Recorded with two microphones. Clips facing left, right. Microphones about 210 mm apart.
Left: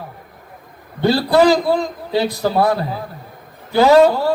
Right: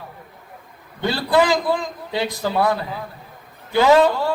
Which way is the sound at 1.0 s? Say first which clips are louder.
Left 5 dB; 40° left (ahead or behind).